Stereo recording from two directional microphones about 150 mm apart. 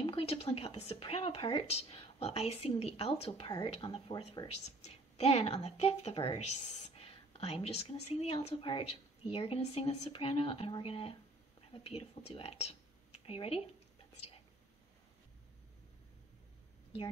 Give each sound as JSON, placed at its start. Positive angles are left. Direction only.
{"t": 0.0, "sound": "a woman's voice", "side_deg": 40}